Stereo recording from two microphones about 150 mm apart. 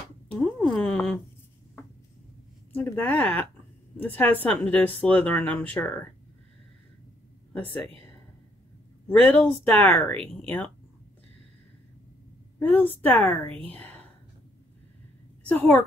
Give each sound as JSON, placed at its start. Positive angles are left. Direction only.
{"t": 0.3, "sound": "a sound", "side_deg": 5}
{"t": 2.7, "sound": "speech", "side_deg": 10}
{"t": 9.0, "sound": "speech", "side_deg": 10}
{"t": 12.5, "sound": "a woman's voice", "side_deg": 10}
{"t": 15.4, "sound": "a woman's voice", "side_deg": 10}